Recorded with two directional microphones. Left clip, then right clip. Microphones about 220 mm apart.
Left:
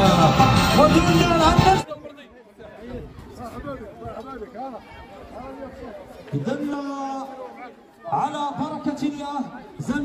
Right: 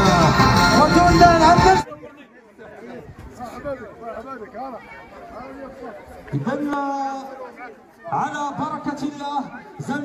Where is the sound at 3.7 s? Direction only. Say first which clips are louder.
Right 6 dB; 10° right (ahead or behind).